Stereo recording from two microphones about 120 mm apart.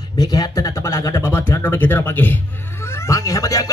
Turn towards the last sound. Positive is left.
turn(degrees=30)  # may be behind; listen again after turning